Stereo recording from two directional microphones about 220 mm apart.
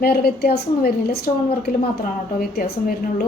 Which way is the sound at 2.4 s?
45° left (ahead or behind).